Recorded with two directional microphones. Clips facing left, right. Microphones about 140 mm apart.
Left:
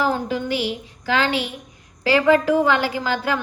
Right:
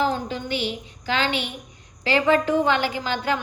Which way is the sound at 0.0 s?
25° right (ahead or behind).